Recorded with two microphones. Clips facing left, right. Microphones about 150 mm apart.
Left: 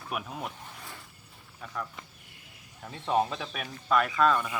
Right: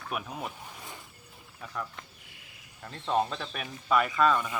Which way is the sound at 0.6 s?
15° right (ahead or behind).